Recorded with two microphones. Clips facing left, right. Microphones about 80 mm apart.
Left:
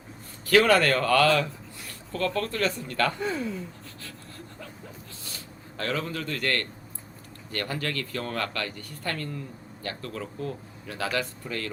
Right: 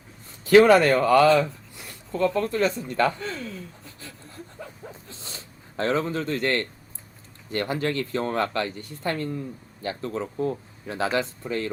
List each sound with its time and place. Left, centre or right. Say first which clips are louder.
0.4 s a man's voice: right 5 dB; right
3.2 s speech: left 4 dB; centre
5.2 s zipper: even; right
7.5 s speech: right 5 dB; right